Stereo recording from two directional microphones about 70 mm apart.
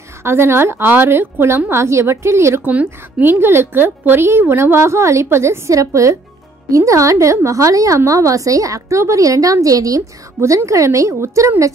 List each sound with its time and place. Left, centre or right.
0.2 s a woman's voice: right
2.7 s a woman's voice: right